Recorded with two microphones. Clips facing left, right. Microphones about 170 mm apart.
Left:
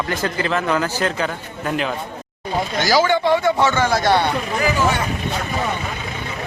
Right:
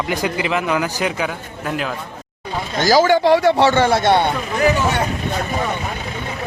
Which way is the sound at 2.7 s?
45° right (ahead or behind).